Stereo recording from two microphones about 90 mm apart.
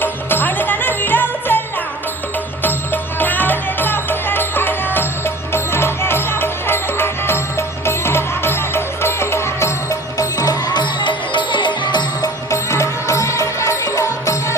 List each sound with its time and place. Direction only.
0.0 s music: 20° left (ahead or behind)
2.6 s music: 20° left (ahead or behind); by 12.3 s 55° left (ahead or behind)
12.5 s music: 35° left (ahead or behind)